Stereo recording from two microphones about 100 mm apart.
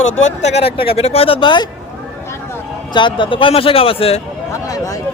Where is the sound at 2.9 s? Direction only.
55° left (ahead or behind); by 4.2 s 75° left (ahead or behind).